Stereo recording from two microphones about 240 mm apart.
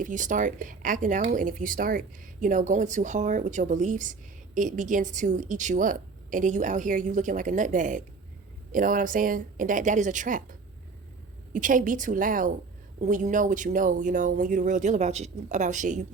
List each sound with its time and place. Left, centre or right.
0.0 s speech: right
11.5 s speech: right